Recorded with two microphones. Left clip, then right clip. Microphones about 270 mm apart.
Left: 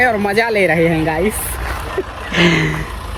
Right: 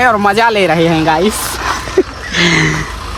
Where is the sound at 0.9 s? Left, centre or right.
Right.